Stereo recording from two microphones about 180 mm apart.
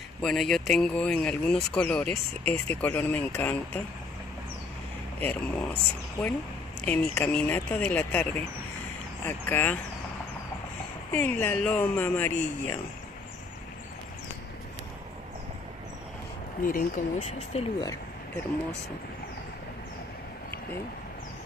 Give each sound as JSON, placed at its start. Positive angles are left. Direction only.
{"t": 0.2, "sound": "speech", "side_deg": 5}
{"t": 5.2, "sound": "speech", "side_deg": 10}
{"t": 11.1, "sound": "speech", "side_deg": 10}
{"t": 16.6, "sound": "speech", "side_deg": 45}